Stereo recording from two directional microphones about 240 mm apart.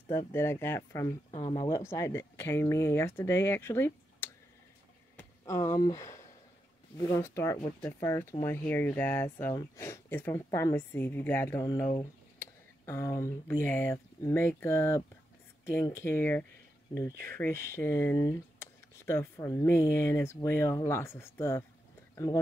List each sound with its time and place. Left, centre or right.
0.3 s speech: centre
1.3 s speech: left
1.9 s speech: centre
5.1 s a sound: centre
7.0 s speech: centre